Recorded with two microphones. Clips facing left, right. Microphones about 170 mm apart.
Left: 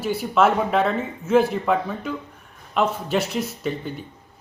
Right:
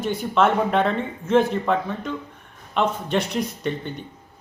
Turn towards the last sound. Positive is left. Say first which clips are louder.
# even
turn(degrees=5)  # may be behind; listen again after turning